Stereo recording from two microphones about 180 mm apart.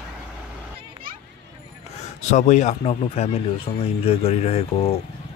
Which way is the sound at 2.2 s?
40° left (ahead or behind).